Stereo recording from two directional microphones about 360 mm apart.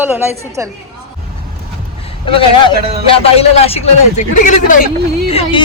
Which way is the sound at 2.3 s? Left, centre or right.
Centre.